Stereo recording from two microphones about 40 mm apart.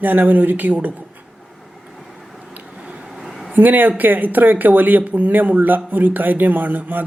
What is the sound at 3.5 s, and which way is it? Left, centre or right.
Speech, right.